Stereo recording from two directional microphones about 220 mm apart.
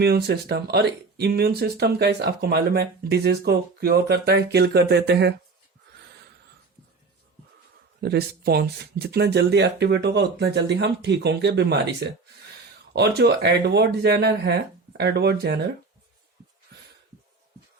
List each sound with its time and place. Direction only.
0.0 s speech: 45° right (ahead or behind)
8.0 s speech: 45° right (ahead or behind)
12.9 s speech: 50° right (ahead or behind)